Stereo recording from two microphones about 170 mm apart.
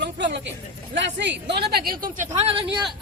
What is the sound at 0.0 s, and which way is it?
Vehicle, 90° right.